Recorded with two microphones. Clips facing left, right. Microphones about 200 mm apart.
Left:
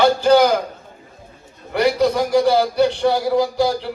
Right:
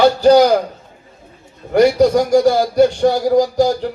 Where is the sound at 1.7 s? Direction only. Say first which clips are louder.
Right 6 dB; 45° right (ahead or behind).